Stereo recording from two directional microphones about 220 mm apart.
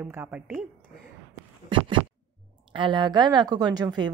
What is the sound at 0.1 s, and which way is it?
Speech, 10° right (ahead or behind).